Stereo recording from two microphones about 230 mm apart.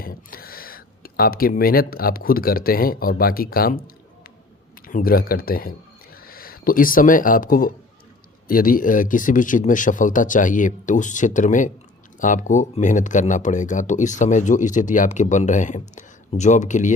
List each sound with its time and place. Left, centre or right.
0.0 s speech: left
4.9 s speech: left